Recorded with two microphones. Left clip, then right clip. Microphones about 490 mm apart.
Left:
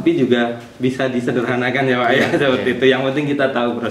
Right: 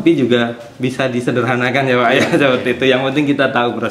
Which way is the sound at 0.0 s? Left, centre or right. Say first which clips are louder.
Right 2 dB; right.